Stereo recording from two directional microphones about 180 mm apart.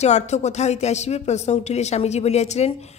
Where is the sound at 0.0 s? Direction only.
40° left (ahead or behind).